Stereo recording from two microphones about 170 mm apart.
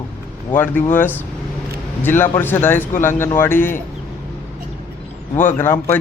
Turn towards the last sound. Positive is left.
turn(degrees=15)  # may be behind; listen again after turning